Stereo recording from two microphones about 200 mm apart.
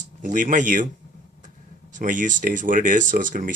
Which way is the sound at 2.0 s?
40° right (ahead or behind).